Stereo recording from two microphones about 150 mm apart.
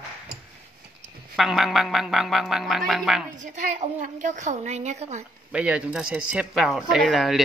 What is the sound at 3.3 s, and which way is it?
A woman's voice, 55° right (ahead or behind).